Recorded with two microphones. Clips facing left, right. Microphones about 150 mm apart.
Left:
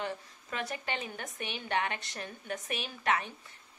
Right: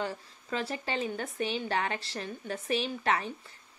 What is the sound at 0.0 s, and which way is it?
A woman's voice, 30° right (ahead or behind).